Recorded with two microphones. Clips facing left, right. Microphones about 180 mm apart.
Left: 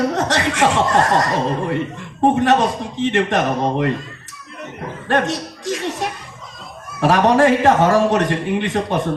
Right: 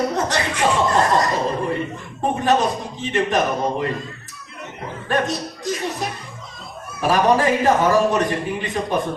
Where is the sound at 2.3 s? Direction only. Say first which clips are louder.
Even; 75° left (ahead or behind).